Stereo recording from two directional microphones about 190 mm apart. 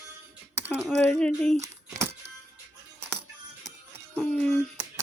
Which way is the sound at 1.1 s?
5° left (ahead or behind).